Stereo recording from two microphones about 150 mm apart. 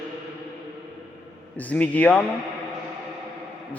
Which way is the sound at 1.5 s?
10° left (ahead or behind).